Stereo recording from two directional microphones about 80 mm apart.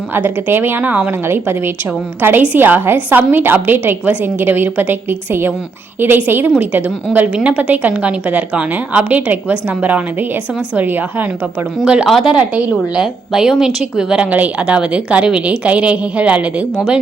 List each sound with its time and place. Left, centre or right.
0.1 s a woman's voice: right
12.0 s a woman's voice: centre
12.4 s a woman's voice: centre